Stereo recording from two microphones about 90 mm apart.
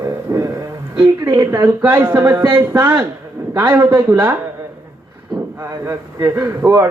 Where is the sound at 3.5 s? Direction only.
40° right (ahead or behind).